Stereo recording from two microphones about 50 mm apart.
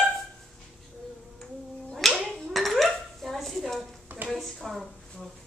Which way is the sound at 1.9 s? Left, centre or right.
Centre.